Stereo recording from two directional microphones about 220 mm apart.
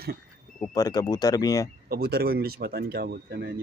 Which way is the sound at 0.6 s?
15° left (ahead or behind).